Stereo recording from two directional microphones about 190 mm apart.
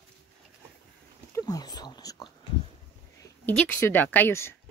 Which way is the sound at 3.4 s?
10° left (ahead or behind).